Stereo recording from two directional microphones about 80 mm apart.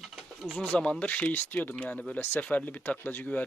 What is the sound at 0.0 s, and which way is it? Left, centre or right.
Pigeon, centre.